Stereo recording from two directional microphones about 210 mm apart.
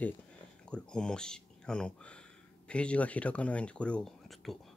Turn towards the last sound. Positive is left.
turn(degrees=0)  # may be behind; listen again after turning